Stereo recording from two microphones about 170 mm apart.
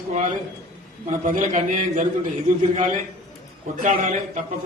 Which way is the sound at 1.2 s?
50° right (ahead or behind).